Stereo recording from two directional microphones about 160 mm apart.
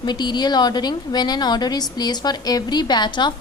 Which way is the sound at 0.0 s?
25° left (ahead or behind).